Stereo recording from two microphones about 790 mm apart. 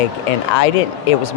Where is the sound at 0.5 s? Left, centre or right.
Left.